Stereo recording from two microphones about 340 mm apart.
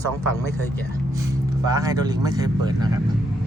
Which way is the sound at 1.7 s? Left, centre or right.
Centre.